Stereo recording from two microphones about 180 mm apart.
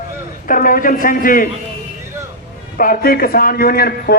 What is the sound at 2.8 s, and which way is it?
A man's voice, 55° left (ahead or behind).